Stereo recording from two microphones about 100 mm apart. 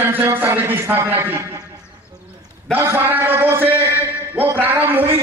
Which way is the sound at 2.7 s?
20° right (ahead or behind).